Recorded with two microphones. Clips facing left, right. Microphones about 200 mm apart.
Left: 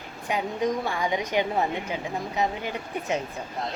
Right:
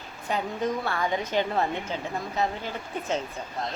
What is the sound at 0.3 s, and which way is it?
A woman's voice, 15° left (ahead or behind).